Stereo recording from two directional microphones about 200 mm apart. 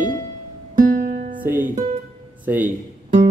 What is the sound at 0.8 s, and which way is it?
Music, 40° right (ahead or behind).